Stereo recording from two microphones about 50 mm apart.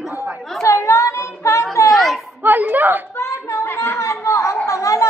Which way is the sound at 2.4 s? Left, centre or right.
Right.